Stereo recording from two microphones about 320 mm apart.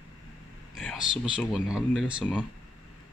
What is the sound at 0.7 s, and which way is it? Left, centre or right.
Speech, centre.